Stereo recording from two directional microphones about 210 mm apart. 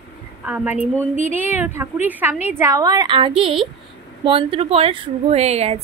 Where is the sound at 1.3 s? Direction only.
10° right (ahead or behind); by 5.8 s 30° right (ahead or behind).